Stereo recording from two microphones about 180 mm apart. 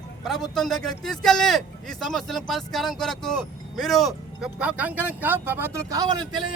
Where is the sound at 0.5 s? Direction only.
Centre (ahead or behind).